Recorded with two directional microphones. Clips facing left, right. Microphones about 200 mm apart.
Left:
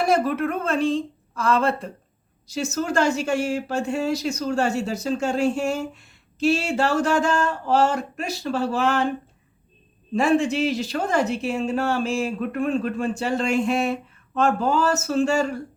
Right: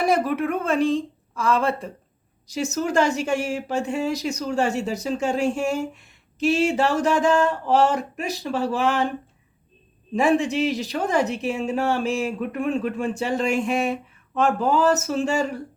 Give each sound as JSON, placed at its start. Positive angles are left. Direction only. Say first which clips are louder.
{"t": 0.0, "sound": "speech", "louder": "even", "side_deg": -15}
{"t": 10.2, "sound": "speech", "louder": "even", "side_deg": -15}